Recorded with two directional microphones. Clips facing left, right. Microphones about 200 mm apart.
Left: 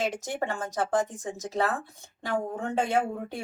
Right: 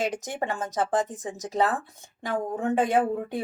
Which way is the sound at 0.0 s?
15° right (ahead or behind).